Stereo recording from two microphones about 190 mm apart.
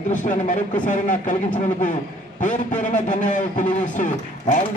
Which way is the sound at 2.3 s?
40° left (ahead or behind).